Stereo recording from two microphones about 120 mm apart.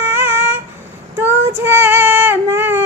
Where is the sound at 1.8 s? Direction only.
15° right (ahead or behind).